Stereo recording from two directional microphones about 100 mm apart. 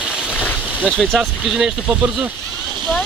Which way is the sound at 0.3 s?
15° left (ahead or behind).